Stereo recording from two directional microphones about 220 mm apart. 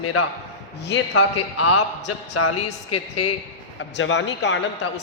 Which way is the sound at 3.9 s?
55° left (ahead or behind).